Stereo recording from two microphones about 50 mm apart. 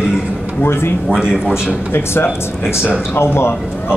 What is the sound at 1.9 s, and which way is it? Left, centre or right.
A man's voice, left.